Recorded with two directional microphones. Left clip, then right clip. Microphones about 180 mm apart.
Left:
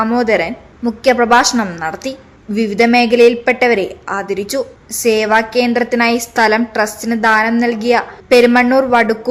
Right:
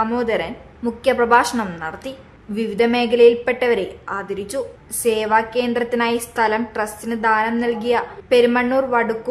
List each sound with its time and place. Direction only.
0.0 s a woman's voice: 20° left (ahead or behind)